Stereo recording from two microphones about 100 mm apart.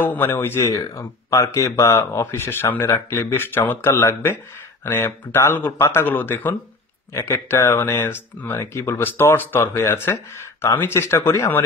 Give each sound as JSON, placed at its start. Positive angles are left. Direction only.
{"t": 0.0, "sound": "speech", "side_deg": 20}